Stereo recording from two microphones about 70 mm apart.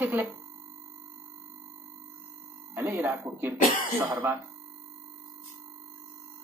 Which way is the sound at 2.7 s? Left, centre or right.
Right.